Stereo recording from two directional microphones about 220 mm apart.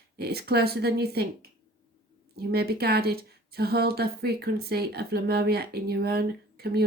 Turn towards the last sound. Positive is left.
turn(degrees=-45)  # may be behind; listen again after turning